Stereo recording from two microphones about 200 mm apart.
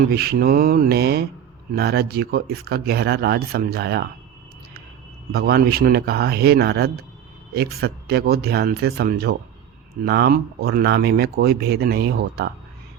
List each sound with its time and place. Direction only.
0.0 s speech: 50° right (ahead or behind)
5.3 s speech: 50° right (ahead or behind)